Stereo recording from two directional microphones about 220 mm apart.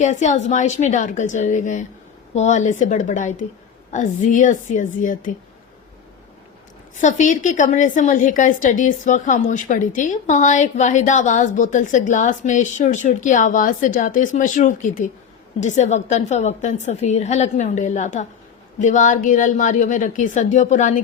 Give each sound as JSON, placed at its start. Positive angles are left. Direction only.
{"t": 0.0, "sound": "a woman's voice", "side_deg": 35}
{"t": 6.9, "sound": "a woman's voice", "side_deg": 35}